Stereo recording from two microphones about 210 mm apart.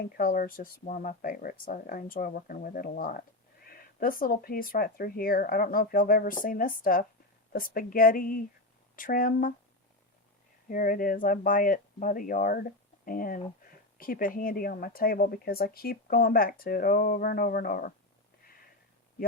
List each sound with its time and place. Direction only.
0.2 s speech: 40° left (ahead or behind)
10.7 s speech: 40° left (ahead or behind)